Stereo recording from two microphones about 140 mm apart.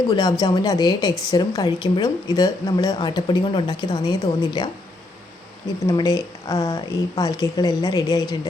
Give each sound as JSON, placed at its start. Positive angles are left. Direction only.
{"t": 0.1, "sound": "speech", "side_deg": 30}
{"t": 5.8, "sound": "speech", "side_deg": 25}